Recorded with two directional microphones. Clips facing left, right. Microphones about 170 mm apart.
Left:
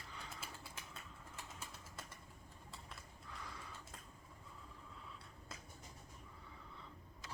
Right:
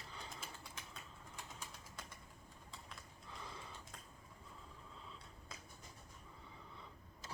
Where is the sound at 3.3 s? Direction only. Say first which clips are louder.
Right 1 dB; 25° right (ahead or behind).